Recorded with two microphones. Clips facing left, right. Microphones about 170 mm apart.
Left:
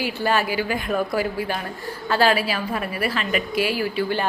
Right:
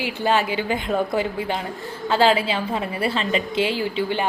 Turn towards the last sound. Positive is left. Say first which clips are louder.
# even
turn(degrees=-20)  # may be behind; listen again after turning